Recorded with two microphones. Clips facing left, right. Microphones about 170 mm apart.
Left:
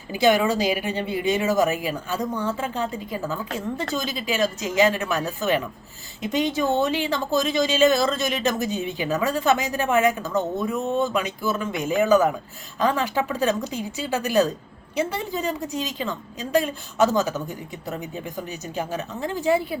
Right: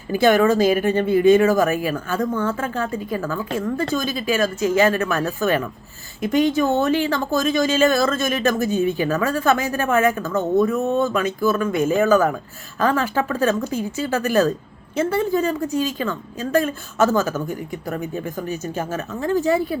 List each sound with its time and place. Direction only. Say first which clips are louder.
0.2 s speech: right 4 dB; 15° left (ahead or behind)